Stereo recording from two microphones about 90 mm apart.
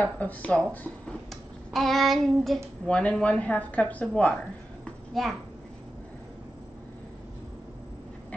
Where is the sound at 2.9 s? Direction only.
15° left (ahead or behind).